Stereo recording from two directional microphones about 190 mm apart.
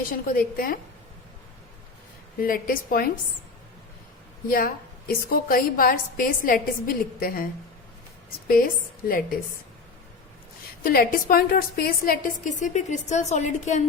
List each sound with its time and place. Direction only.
0.1 s a woman's voice: 50° left (ahead or behind)
2.4 s a woman's voice: 50° left (ahead or behind)
4.4 s a woman's voice: 50° left (ahead or behind)
8.4 s a woman's voice: 50° left (ahead or behind)
10.8 s a woman's voice: 50° left (ahead or behind)